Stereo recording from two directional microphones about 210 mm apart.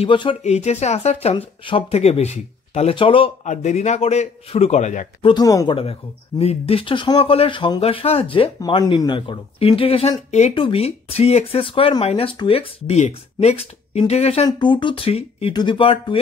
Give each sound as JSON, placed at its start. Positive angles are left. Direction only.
{"t": 0.0, "sound": "a man's voice", "side_deg": 25}
{"t": 5.3, "sound": "speech", "side_deg": 15}